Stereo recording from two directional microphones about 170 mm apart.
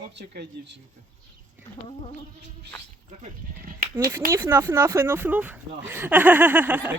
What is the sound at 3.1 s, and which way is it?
Speech, 45° right (ahead or behind).